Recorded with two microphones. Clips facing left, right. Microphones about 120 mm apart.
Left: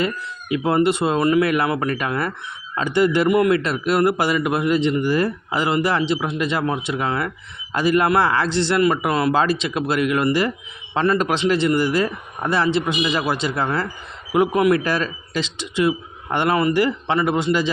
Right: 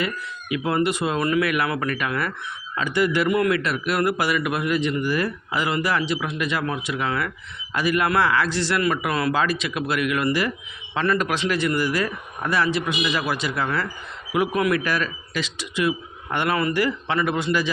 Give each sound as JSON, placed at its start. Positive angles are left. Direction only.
{"t": 0.0, "sound": "a man's voice", "side_deg": 30}